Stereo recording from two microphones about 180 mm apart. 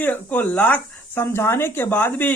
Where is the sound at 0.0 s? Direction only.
10° left (ahead or behind).